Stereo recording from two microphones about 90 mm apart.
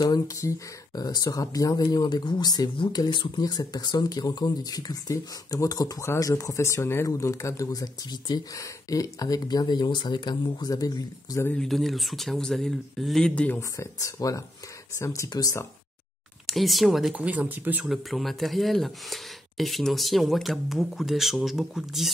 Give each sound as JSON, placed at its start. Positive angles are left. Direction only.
{"t": 0.4, "sound": "speech", "side_deg": 40}
{"t": 11.5, "sound": "speech", "side_deg": 5}
{"t": 13.3, "sound": "speech", "side_deg": 15}
{"t": 13.6, "sound": "speech", "side_deg": 35}
{"t": 16.4, "sound": "speech", "side_deg": 0}
{"t": 17.1, "sound": "speech", "side_deg": -15}
{"t": 17.8, "sound": "speech", "side_deg": 0}